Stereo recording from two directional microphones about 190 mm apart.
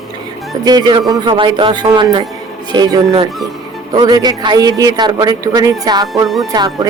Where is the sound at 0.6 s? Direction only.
20° right (ahead or behind).